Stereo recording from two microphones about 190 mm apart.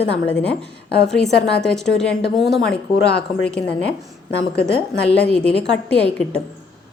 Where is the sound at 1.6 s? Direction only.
5° left (ahead or behind).